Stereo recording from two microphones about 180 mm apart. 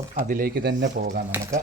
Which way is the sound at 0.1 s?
50° right (ahead or behind).